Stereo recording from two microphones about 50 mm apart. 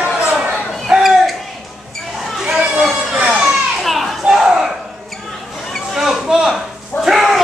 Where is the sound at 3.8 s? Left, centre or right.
Centre.